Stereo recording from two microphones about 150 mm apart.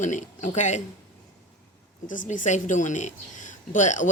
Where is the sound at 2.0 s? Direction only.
60° left (ahead or behind).